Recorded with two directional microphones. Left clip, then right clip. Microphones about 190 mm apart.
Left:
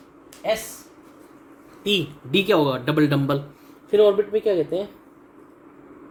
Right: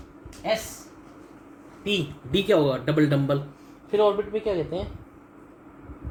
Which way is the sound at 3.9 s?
70° left (ahead or behind).